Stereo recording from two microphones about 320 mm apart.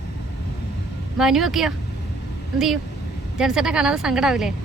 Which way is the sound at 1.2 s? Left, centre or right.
Centre.